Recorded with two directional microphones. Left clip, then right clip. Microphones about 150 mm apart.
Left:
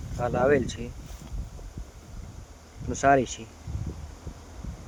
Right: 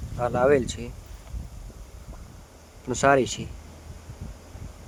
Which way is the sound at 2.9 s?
45° right (ahead or behind).